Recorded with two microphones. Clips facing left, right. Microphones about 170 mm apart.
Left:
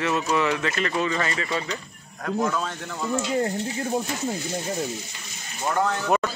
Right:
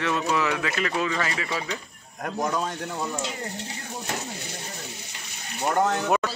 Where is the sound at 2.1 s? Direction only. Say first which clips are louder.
Left 2 dB; 20° right (ahead or behind).